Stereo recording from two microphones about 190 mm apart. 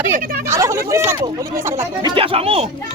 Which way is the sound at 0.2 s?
50° right (ahead or behind).